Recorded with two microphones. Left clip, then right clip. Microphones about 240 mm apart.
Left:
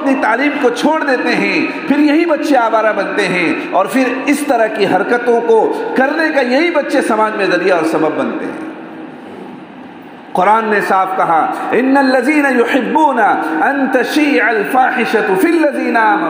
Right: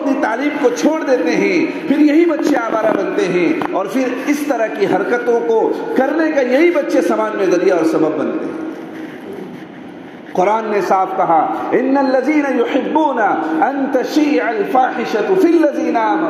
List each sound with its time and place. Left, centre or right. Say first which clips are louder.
0.0 s a man's voice: left 4 dB; left
10.3 s a man's voice: left 4 dB; left